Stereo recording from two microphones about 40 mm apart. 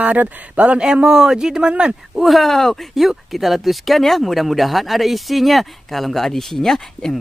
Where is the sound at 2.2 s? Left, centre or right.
Centre.